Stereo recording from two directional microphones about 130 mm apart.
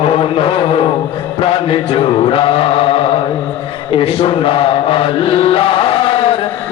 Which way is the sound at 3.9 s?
45° left (ahead or behind).